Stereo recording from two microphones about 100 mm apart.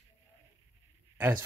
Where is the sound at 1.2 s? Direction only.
20° right (ahead or behind).